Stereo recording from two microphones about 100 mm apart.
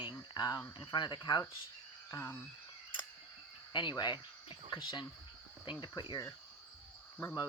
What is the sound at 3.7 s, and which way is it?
Speech, 50° left (ahead or behind).